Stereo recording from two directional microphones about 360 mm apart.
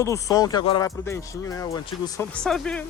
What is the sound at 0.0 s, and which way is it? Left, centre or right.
Speech, centre.